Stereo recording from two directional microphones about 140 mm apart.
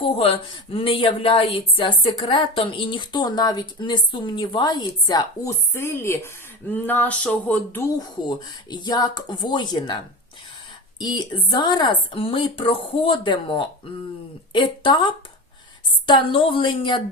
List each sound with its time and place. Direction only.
0.0 s speech: 40° left (ahead or behind); by 6.1 s 15° left (ahead or behind)
6.7 s a sound: 15° left (ahead or behind)
8.7 s speech: 30° left (ahead or behind)
11.0 s speech: 30° left (ahead or behind)